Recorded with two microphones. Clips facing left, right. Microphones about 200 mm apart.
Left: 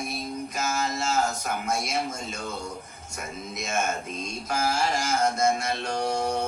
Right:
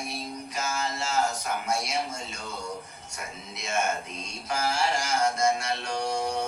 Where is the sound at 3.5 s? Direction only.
45° left (ahead or behind).